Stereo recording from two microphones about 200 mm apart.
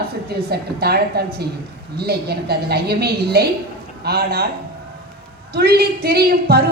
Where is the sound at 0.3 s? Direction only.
50° right (ahead or behind).